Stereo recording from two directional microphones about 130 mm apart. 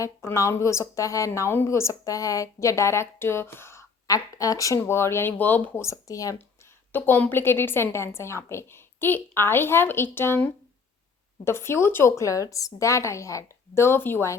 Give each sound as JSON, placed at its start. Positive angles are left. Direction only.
{"t": 0.0, "sound": "speech", "side_deg": 25}
{"t": 6.9, "sound": "a woman's voice", "side_deg": 15}